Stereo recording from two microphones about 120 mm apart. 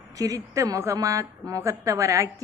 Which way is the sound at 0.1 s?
30° right (ahead or behind).